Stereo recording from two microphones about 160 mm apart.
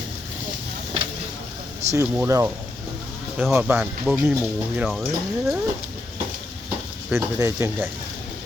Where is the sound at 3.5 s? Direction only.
10° right (ahead or behind).